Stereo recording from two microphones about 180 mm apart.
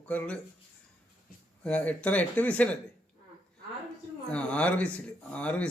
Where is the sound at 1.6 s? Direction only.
5° left (ahead or behind).